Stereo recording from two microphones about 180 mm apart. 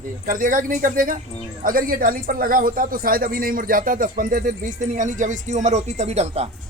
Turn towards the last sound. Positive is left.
turn(degrees=-35)  # may be behind; listen again after turning